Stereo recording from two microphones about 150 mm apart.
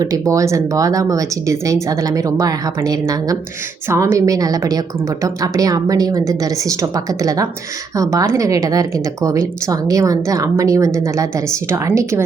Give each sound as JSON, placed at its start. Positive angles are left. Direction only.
{"t": 0.0, "sound": "a woman's voice", "side_deg": -20}